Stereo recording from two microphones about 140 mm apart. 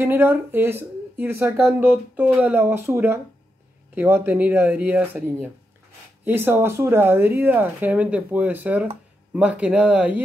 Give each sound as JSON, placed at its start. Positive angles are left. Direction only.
{"t": 0.0, "sound": "speech", "side_deg": -15}